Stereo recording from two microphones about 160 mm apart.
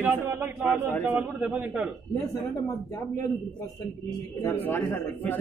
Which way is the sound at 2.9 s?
20° left (ahead or behind).